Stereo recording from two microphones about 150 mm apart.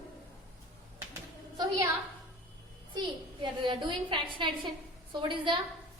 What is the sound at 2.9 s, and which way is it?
A woman's voice, 30° right (ahead or behind).